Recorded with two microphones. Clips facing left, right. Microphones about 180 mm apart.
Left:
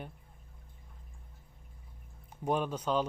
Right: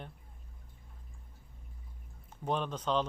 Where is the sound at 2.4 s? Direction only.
10° left (ahead or behind).